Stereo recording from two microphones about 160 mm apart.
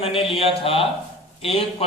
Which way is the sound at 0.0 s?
35° left (ahead or behind).